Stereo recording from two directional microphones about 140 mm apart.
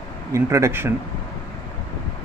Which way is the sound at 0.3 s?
20° right (ahead or behind).